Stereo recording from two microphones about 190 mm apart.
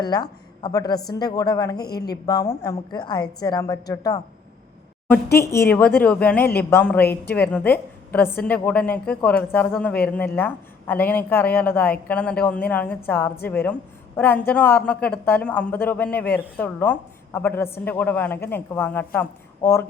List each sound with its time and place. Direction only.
0.0 s a woman's voice: 20° left (ahead or behind)